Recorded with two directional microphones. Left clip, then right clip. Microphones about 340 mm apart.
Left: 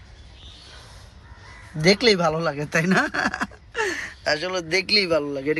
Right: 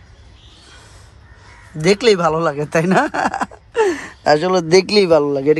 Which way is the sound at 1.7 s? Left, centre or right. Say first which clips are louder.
Right 4 dB; centre.